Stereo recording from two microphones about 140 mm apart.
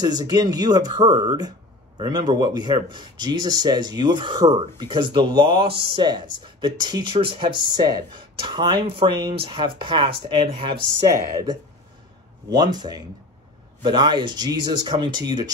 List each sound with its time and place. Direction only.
0.0 s speech: 30° right (ahead or behind)
10.9 s speech: 25° right (ahead or behind)